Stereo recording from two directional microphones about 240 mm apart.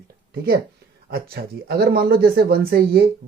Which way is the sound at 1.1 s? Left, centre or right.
Right.